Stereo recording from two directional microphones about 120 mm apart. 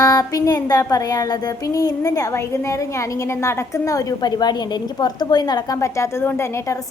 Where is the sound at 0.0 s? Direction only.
30° left (ahead or behind).